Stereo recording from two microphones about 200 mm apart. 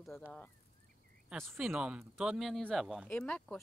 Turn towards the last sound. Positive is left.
turn(degrees=5)  # may be behind; listen again after turning